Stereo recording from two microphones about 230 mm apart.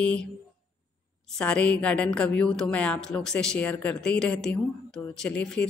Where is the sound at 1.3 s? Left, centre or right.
Centre.